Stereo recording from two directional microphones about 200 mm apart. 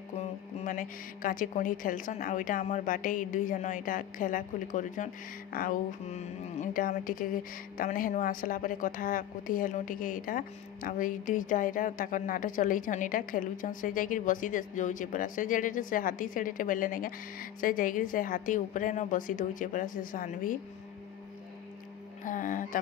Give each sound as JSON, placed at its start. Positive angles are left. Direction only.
{"t": 0.7, "sound": "a woman's voice", "side_deg": 40}
{"t": 22.2, "sound": "a woman's voice", "side_deg": 40}